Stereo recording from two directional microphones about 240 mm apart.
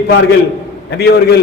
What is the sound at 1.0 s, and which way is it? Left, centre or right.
Speech, left.